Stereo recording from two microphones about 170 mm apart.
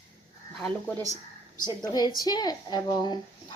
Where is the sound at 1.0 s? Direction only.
40° left (ahead or behind).